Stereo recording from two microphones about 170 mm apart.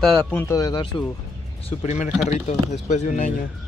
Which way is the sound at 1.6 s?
45° left (ahead or behind).